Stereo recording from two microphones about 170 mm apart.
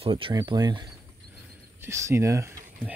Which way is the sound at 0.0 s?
30° right (ahead or behind).